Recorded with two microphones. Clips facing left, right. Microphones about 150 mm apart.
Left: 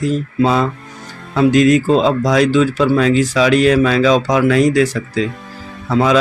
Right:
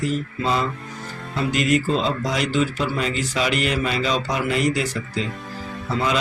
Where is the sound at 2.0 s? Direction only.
90° left.